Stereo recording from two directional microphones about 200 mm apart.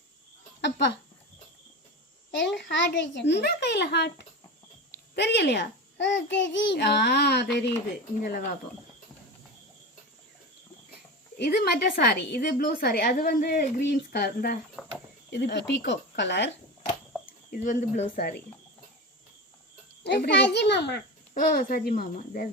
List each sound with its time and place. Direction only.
0.6 s a child's voice: 60° left (ahead or behind)
2.3 s a child's voice: 65° left (ahead or behind)
5.1 s a child's voice: 60° left (ahead or behind)
8.2 s speech: 40° left (ahead or behind)
11.3 s a woman's voice: 55° left (ahead or behind)
17.5 s speech: 40° left (ahead or behind)
20.1 s a child's voice: 55° left (ahead or behind)